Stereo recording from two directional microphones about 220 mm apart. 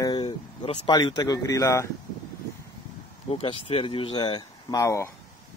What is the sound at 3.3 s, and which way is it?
Speech, 25° left (ahead or behind).